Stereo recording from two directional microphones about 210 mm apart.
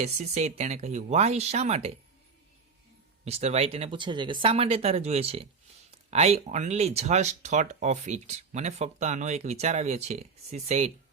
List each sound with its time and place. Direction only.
0.0 s speech: 30° right (ahead or behind)
3.2 s speech: 30° right (ahead or behind)